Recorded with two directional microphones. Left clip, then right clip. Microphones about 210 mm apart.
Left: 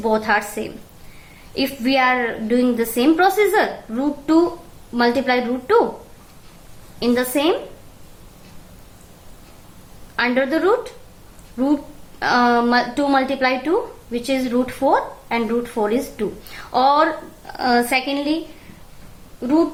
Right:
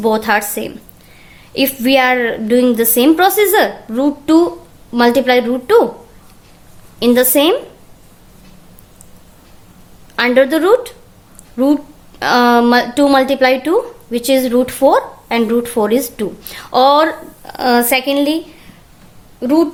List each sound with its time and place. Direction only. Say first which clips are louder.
0.0 s a woman's voice: right 5 dB; 45° right (ahead or behind)
7.0 s a woman's voice: right 8 dB; 45° right (ahead or behind)
10.2 s a woman's voice: right 7 dB; 45° right (ahead or behind)
19.4 s a woman's voice: right 5 dB; 45° right (ahead or behind)